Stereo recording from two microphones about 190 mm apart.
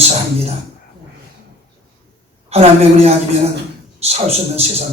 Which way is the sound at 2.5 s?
35° right (ahead or behind).